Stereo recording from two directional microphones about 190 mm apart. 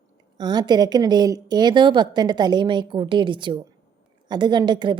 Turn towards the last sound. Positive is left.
turn(degrees=-25)  # may be behind; listen again after turning